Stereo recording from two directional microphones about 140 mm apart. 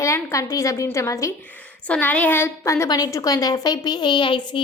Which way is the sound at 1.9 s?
10° left (ahead or behind).